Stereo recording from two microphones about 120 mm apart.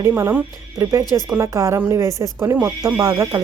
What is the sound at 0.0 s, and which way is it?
A woman's voice, 25° right (ahead or behind).